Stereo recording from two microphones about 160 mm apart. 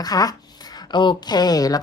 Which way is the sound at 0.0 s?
25° left (ahead or behind).